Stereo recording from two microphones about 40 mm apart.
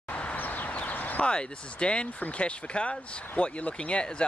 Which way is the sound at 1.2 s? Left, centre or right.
Left.